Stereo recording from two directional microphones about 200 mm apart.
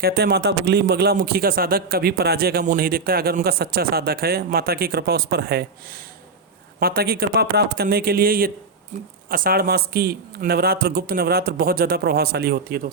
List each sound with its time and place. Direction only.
0.0 s a man's voice: 50° right (ahead or behind)